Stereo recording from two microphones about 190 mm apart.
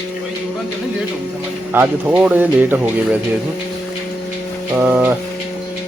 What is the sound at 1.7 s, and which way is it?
Speech, 10° right (ahead or behind).